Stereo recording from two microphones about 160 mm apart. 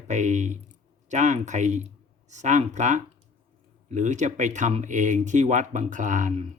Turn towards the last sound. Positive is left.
turn(degrees=-55)  # may be behind; listen again after turning